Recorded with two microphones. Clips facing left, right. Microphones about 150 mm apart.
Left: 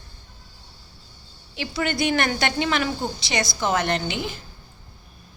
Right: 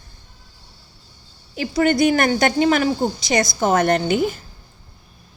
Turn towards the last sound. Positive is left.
turn(degrees=-45)  # may be behind; listen again after turning